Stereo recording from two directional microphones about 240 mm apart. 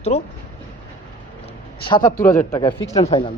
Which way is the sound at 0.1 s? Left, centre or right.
Left.